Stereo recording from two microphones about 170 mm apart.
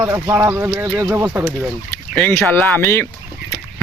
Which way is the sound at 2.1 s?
5° left (ahead or behind).